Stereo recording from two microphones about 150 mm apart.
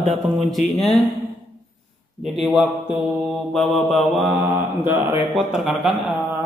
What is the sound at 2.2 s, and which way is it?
Mantra, centre (ahead or behind).